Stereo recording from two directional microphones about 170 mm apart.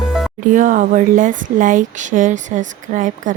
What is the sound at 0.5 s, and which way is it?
Speech, 50° right (ahead or behind).